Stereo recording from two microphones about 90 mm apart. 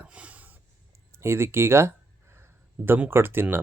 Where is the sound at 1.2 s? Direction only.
30° right (ahead or behind).